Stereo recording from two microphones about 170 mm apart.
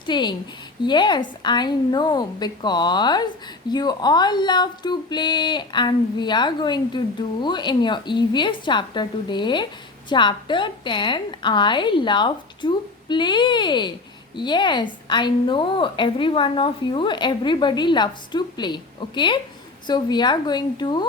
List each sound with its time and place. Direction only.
0.0 s a woman's voice: 25° left (ahead or behind)